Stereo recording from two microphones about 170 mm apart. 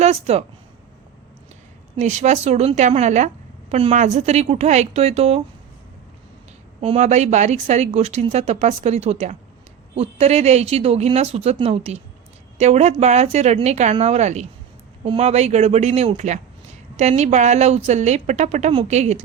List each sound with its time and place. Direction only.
0.0 s speech: 40° right (ahead or behind)
2.0 s a woman's voice: 45° right (ahead or behind)
6.8 s a woman's voice: 40° right (ahead or behind)